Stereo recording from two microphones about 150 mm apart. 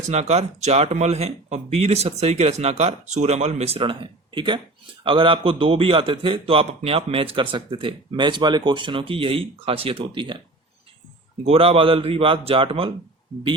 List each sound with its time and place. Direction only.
0.1 s a man's voice: 45° right (ahead or behind)
11.4 s a man's voice: 40° right (ahead or behind)